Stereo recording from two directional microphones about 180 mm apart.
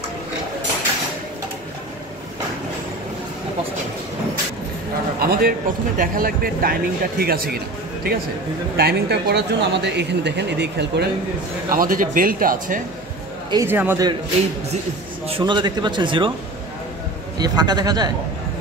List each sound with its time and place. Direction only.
5.2 s a man's voice: 55° right (ahead or behind)
11.7 s speech: 50° right (ahead or behind)
13.5 s a man's voice: 15° right (ahead or behind)
15.2 s speech: 30° right (ahead or behind)
17.4 s speech: 20° right (ahead or behind)